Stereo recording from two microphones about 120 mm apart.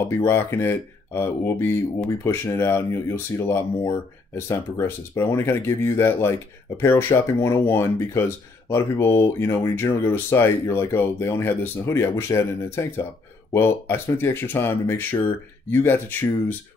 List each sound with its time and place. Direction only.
0.2 s speech: 20° left (ahead or behind)